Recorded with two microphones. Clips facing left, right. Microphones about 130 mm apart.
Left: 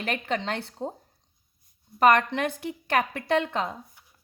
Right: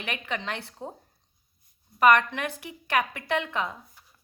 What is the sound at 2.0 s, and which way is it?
A woman's voice, 35° left (ahead or behind).